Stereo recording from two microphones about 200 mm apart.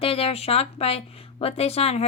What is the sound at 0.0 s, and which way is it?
A woman's voice, 30° left (ahead or behind).